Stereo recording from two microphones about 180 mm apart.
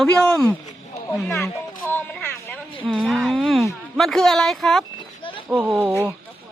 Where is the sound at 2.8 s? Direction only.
Centre (ahead or behind).